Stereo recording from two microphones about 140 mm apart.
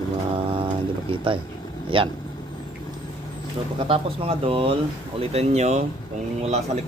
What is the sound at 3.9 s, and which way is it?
Speech, 40° right (ahead or behind).